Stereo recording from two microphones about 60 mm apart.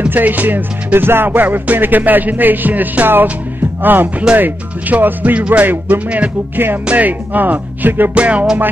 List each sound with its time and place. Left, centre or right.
0.1 s music: right
4.4 s speech: right
6.5 s music: right
6.9 s speech: right